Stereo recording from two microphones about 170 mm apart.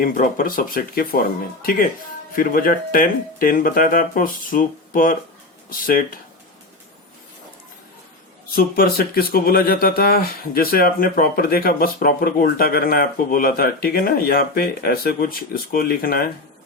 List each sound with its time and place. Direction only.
0.0 s speech: 55° left (ahead or behind)
2.3 s speech: 55° left (ahead or behind)
8.5 s speech: 60° left (ahead or behind)